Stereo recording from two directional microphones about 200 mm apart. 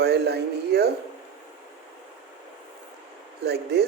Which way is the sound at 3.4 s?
55° right (ahead or behind).